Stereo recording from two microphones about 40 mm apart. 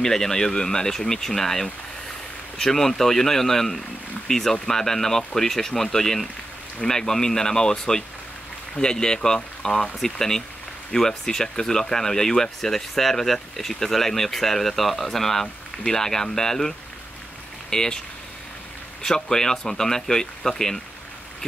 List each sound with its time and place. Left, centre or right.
0.0 s speech: centre
19.0 s speech: centre